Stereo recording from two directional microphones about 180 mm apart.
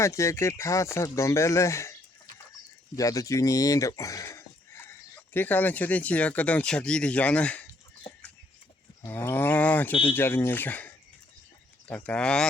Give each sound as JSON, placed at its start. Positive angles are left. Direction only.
{"t": 0.0, "sound": "speech", "side_deg": 15}
{"t": 9.0, "sound": "speech", "side_deg": 15}